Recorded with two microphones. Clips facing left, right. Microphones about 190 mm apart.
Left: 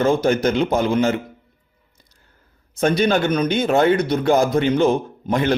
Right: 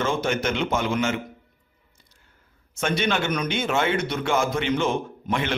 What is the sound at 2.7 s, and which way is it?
A man's voice, 35° left (ahead or behind).